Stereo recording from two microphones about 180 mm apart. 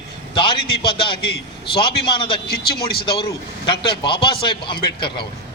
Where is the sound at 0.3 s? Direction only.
30° left (ahead or behind).